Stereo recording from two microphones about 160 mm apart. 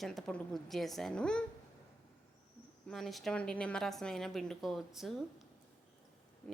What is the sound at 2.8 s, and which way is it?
Speech, centre (ahead or behind).